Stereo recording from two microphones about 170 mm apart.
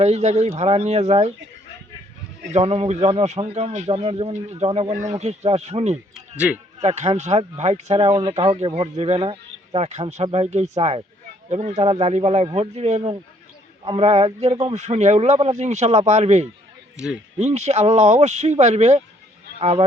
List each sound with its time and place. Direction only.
0.0 s speech: 40° right (ahead or behind)
2.5 s speech: 40° right (ahead or behind)
6.1 s a man's voice: 5° right (ahead or behind)
6.7 s speech: 40° right (ahead or behind)